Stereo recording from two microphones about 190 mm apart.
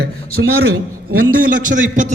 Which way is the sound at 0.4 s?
80° right.